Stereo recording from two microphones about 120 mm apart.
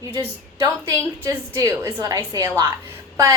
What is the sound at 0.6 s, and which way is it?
A woman's voice, 25° right (ahead or behind).